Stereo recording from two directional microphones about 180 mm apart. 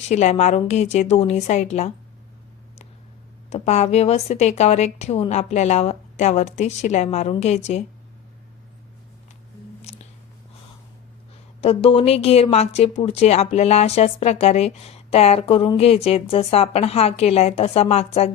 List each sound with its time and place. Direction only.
0.0 s speech: 40° left (ahead or behind)
3.5 s speech: 35° left (ahead or behind)
11.6 s speech: 30° left (ahead or behind)